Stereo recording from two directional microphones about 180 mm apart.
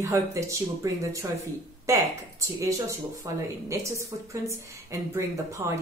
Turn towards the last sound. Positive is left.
turn(degrees=-15)  # may be behind; listen again after turning